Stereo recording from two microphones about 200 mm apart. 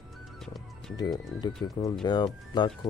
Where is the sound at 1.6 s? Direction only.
20° left (ahead or behind).